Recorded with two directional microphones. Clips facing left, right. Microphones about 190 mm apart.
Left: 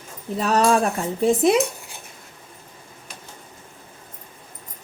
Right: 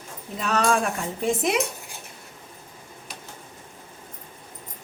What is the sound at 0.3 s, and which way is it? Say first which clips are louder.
Speech: left 4 dB; 35° left (ahead or behind).